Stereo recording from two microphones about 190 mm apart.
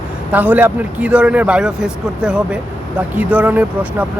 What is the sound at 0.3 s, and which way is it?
Speech, 10° right (ahead or behind).